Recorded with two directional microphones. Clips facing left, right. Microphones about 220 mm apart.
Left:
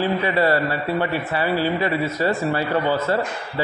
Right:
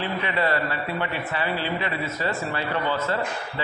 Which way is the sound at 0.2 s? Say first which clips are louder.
Left 6 dB; 40° left (ahead or behind).